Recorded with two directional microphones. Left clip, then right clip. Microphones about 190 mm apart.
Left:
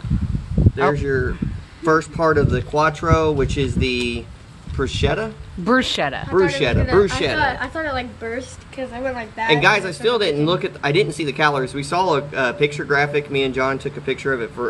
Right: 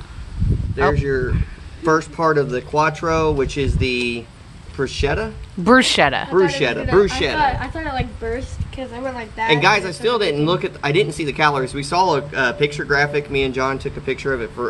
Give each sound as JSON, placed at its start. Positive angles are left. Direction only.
{"t": 0.7, "sound": "speech", "side_deg": -5}
{"t": 5.6, "sound": "speech", "side_deg": -25}
{"t": 6.3, "sound": "a man's voice", "side_deg": -10}
{"t": 7.3, "sound": "a woman's voice", "side_deg": 15}
{"t": 9.5, "sound": "a man's voice", "side_deg": -15}